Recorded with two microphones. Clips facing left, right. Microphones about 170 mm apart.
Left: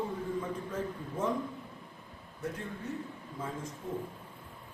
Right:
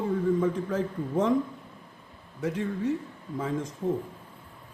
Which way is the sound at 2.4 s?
90° right.